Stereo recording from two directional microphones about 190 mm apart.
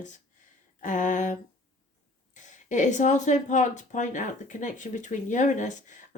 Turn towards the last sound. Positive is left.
turn(degrees=40)  # may be behind; listen again after turning